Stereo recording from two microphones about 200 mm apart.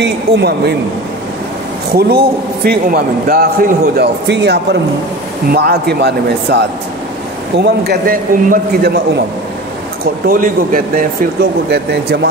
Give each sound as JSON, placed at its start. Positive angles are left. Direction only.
{"t": 0.0, "sound": "speech", "side_deg": -55}
{"t": 2.0, "sound": "a man's voice", "side_deg": -50}
{"t": 10.2, "sound": "a man's voice", "side_deg": -45}
{"t": 11.7, "sound": "speech", "side_deg": -55}